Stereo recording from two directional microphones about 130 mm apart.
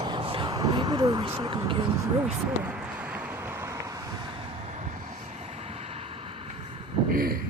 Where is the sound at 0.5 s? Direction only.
30° right (ahead or behind).